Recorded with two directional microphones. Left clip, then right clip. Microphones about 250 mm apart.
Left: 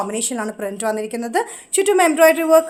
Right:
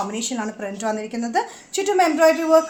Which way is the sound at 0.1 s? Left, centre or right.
Left.